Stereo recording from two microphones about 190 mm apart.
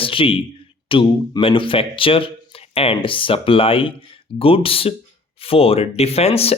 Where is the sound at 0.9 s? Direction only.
25° left (ahead or behind).